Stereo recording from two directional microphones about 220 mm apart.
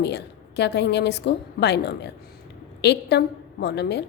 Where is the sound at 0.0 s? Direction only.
50° left (ahead or behind).